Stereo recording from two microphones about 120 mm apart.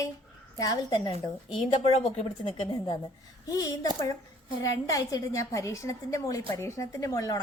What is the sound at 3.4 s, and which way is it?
A woman's voice, 30° left (ahead or behind).